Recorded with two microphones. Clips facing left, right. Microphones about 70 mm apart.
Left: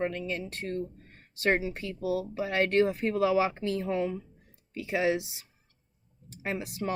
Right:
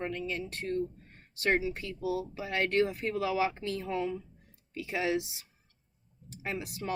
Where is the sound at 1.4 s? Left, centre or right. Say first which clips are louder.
Left 2 dB; left.